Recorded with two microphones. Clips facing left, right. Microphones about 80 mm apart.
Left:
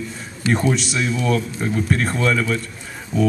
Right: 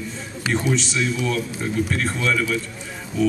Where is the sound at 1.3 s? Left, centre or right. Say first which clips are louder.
Left 4 dB; centre.